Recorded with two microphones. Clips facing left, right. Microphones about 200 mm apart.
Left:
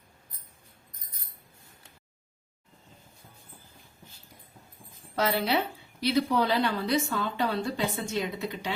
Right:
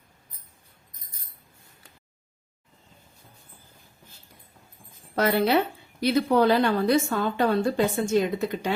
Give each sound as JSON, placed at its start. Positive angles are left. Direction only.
{"t": 5.1, "sound": "a woman's voice", "side_deg": -55}